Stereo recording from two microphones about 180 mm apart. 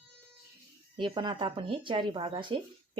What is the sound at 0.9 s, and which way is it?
Speech, 25° right (ahead or behind).